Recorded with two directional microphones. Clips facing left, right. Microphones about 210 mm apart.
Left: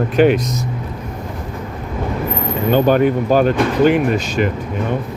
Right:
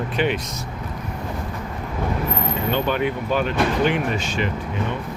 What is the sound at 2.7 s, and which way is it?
Speech, 45° left (ahead or behind).